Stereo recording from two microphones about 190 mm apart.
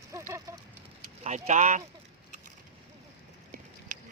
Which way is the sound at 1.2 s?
40° right (ahead or behind).